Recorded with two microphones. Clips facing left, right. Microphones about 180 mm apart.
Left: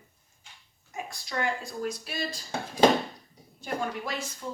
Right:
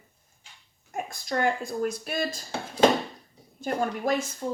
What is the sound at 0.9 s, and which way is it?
Speech, 45° right (ahead or behind).